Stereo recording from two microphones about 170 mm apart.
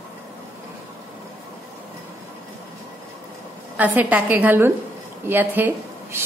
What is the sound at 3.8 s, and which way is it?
A woman's voice, 10° right (ahead or behind).